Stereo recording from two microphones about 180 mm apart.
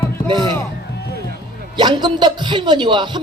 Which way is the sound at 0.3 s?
25° right (ahead or behind).